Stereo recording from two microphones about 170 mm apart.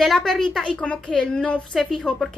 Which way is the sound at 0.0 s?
Centre (ahead or behind).